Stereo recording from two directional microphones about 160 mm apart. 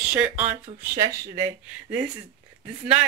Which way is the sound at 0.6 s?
25° right (ahead or behind).